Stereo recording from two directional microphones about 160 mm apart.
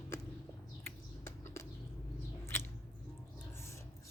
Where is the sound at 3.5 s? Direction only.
15° left (ahead or behind).